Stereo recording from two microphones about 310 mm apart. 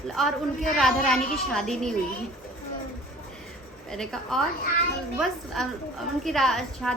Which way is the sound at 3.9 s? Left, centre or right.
Centre.